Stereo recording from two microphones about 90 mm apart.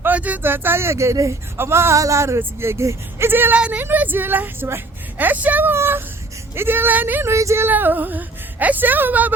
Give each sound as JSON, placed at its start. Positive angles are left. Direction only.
{"t": 0.0, "sound": "speech", "side_deg": -20}